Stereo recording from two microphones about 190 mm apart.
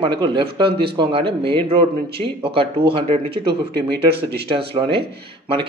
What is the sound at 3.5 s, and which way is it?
Speech, 55° right (ahead or behind).